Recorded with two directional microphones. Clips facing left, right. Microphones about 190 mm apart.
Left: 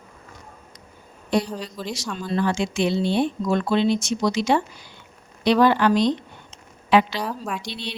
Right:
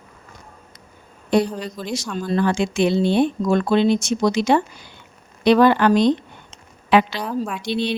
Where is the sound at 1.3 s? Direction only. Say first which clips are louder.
Right 5 dB; 55° right (ahead or behind).